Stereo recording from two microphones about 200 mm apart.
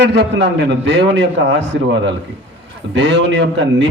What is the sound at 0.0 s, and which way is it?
A man's voice, 60° right (ahead or behind).